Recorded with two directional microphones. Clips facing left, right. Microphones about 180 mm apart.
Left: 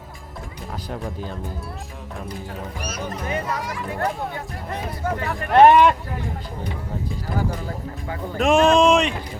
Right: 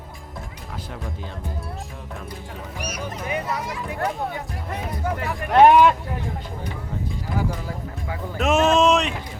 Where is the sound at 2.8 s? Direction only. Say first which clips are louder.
Even; 15° right (ahead or behind).